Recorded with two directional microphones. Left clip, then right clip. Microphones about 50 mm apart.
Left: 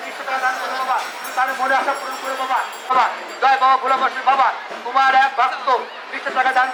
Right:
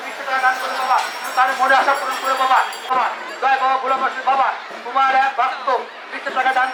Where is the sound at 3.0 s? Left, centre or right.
Centre.